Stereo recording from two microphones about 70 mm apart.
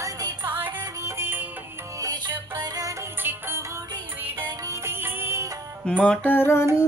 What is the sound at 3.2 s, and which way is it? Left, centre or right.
Music, right.